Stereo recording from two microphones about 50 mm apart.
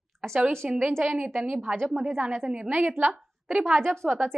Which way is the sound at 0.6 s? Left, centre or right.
Right.